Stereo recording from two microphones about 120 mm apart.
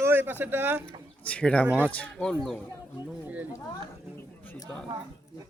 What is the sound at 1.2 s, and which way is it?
Speech, 10° left (ahead or behind).